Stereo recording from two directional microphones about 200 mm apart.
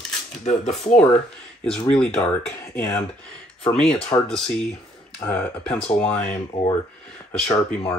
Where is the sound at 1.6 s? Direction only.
5° left (ahead or behind).